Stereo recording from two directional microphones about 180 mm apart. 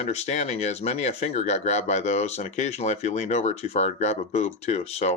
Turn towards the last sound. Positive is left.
turn(degrees=35)  # may be behind; listen again after turning